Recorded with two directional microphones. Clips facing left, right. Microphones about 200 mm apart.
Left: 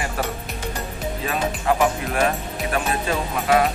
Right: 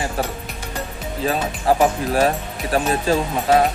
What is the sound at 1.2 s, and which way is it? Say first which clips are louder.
Speech: right 4 dB; 35° right (ahead or behind).